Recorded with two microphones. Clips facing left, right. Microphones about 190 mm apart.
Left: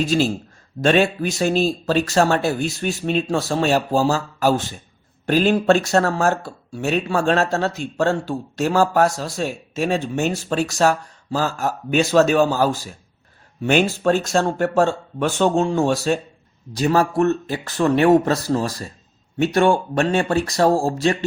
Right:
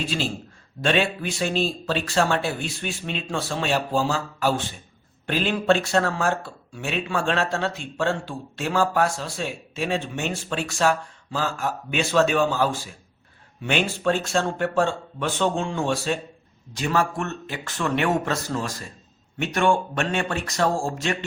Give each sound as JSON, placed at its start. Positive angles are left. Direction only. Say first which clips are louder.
{"t": 0.0, "sound": "a man's voice", "louder": "left 8 dB", "side_deg": 40}